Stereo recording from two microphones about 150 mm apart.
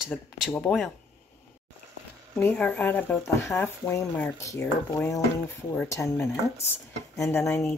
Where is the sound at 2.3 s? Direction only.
10° left (ahead or behind).